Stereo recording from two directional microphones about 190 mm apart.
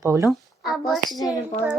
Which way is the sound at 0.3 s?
Centre (ahead or behind).